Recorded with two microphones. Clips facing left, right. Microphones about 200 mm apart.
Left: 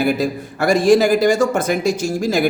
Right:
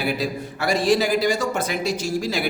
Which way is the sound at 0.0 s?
45° left (ahead or behind).